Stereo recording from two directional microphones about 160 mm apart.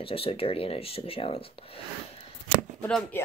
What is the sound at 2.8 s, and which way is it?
Speech, 5° left (ahead or behind).